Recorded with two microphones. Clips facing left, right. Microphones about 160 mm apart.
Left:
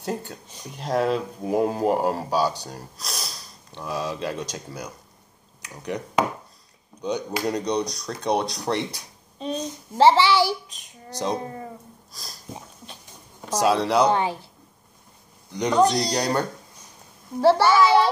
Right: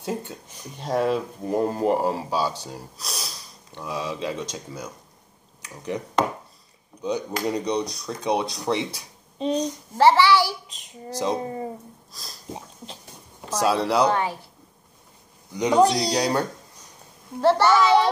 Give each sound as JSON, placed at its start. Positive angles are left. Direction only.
{"t": 0.0, "sound": "speech", "side_deg": 0}
{"t": 9.4, "sound": "a child's voice", "side_deg": -20}
{"t": 9.9, "sound": "a child's voice", "side_deg": 20}
{"t": 10.7, "sound": "speech", "side_deg": -25}
{"t": 12.1, "sound": "a sound", "side_deg": 0}
{"t": 13.6, "sound": "speech", "side_deg": 0}
{"t": 15.5, "sound": "speech", "side_deg": -10}
{"t": 17.4, "sound": "a child's voice", "side_deg": 10}